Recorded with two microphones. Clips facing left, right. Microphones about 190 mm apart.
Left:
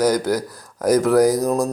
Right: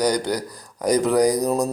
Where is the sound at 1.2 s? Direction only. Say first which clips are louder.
Left 2 dB; 15° right (ahead or behind).